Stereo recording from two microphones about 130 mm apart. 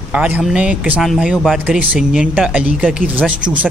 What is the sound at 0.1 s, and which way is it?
Speech, 10° right (ahead or behind).